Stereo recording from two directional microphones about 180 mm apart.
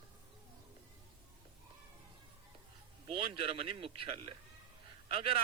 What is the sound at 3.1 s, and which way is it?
A man's voice, 30° right (ahead or behind).